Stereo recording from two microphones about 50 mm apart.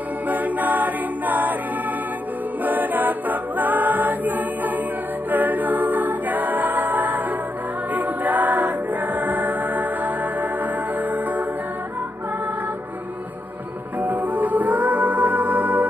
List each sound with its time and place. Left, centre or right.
0.3 s music: right
2.6 s a capella: right
5.3 s choir: right
10.6 s music: right
13.9 s music: right